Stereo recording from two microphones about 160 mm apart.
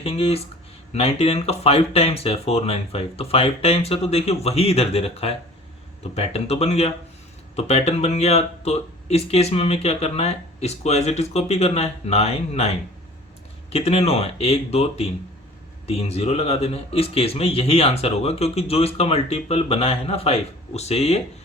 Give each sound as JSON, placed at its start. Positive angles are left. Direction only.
{"t": 0.0, "sound": "a man's voice", "side_deg": 40}